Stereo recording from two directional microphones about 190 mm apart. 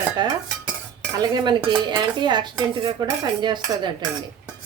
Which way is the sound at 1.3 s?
25° right (ahead or behind).